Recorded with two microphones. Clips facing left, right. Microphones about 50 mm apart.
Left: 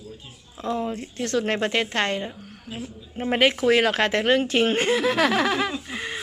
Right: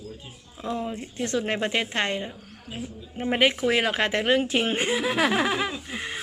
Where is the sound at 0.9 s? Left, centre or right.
Centre.